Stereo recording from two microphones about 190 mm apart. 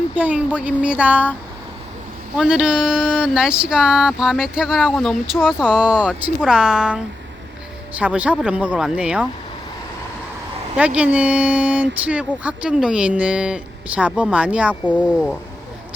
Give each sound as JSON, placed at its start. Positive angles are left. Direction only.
{"t": 0.1, "sound": "speech", "side_deg": -5}
{"t": 2.4, "sound": "speech", "side_deg": -5}
{"t": 10.8, "sound": "speech", "side_deg": -5}